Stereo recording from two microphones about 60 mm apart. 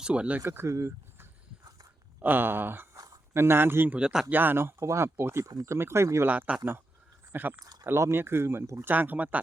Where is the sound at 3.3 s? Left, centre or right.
Right.